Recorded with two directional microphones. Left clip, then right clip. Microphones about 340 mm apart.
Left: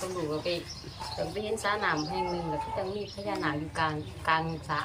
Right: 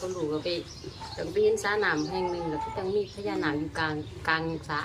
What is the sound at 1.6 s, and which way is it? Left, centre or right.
Speech, centre.